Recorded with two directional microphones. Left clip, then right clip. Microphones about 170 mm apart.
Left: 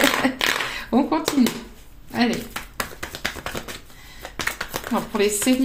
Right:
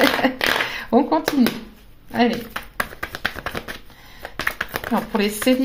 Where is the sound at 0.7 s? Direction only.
35° right (ahead or behind).